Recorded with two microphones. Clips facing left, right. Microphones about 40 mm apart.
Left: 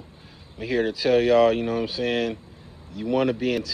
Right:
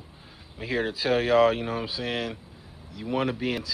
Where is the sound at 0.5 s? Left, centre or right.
Right.